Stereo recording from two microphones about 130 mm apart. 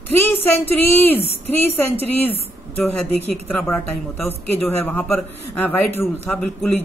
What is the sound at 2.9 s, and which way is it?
Speech, 10° left (ahead or behind).